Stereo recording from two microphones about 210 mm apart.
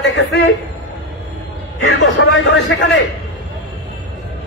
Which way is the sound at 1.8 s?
60° left (ahead or behind).